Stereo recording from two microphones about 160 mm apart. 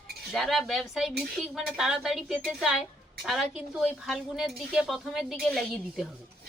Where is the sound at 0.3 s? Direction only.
Centre (ahead or behind).